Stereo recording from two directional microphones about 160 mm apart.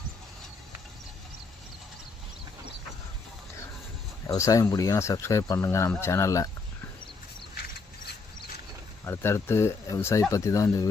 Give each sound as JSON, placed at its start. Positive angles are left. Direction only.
{"t": 4.3, "sound": "speech", "side_deg": 20}
{"t": 9.0, "sound": "speech", "side_deg": 15}